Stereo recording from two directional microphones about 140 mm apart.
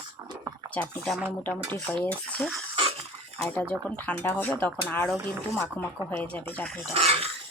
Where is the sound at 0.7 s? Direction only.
10° left (ahead or behind).